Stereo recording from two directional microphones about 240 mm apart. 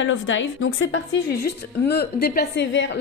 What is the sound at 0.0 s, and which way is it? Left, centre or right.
A woman's voice, left.